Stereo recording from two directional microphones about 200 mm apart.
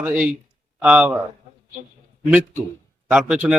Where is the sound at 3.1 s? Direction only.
5° right (ahead or behind).